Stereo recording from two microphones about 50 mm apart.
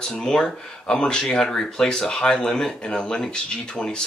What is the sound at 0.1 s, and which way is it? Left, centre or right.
Speech, centre.